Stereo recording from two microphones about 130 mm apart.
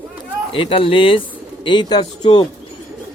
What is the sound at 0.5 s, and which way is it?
Speech, 45° left (ahead or behind).